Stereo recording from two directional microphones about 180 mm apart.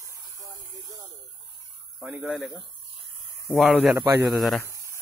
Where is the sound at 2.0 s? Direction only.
5° right (ahead or behind).